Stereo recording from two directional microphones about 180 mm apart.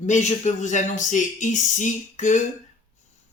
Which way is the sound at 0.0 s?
40° left (ahead or behind).